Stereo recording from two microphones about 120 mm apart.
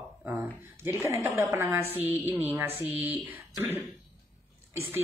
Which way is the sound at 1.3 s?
25° right (ahead or behind).